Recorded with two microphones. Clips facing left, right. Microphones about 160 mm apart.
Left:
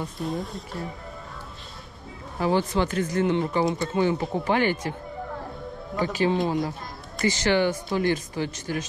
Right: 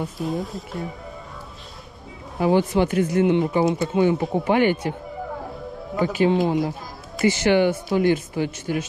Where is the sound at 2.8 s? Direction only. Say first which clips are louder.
Right 5 dB; 15° right (ahead or behind).